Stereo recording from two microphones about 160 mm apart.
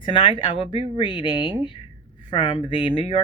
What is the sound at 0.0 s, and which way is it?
Speech, 30° left (ahead or behind).